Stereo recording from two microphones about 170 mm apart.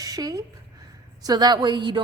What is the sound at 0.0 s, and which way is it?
A woman's voice, 20° right (ahead or behind).